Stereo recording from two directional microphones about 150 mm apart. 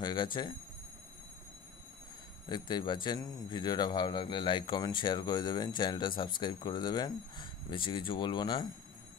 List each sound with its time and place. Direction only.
0.0 s speech: 30° left (ahead or behind)
2.5 s speech: 30° left (ahead or behind)